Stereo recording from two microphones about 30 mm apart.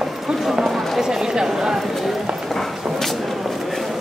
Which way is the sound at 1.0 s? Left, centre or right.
Right.